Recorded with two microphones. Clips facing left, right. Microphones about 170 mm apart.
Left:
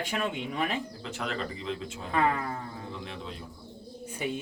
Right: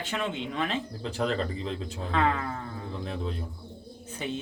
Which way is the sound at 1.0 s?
35° right (ahead or behind).